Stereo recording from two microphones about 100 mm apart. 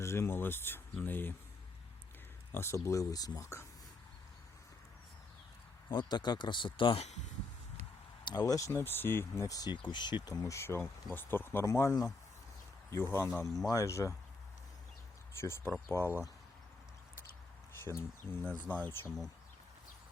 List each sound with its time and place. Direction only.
0.0 s speech: 25° left (ahead or behind)
2.5 s speech: 25° left (ahead or behind)
5.9 s speech: 50° left (ahead or behind); by 7.1 s 65° left (ahead or behind)
8.2 s speech: 45° left (ahead or behind); by 9.5 s 20° left (ahead or behind)
9.5 s speech: 40° left (ahead or behind)
15.4 s speech: 25° left (ahead or behind)
17.8 s speech: 25° left (ahead or behind)